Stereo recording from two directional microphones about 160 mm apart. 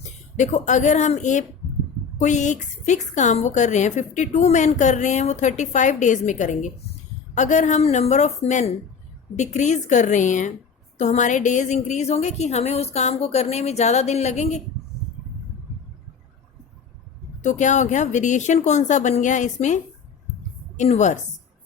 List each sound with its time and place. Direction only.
0.3 s a woman's voice: 50° left (ahead or behind)
17.4 s a woman's voice: 50° left (ahead or behind)